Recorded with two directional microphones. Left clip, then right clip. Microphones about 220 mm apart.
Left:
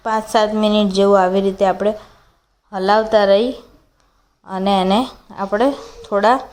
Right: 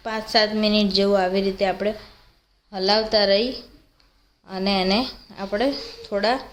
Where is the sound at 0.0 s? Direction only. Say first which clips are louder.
Left 5 dB; 15° left (ahead or behind).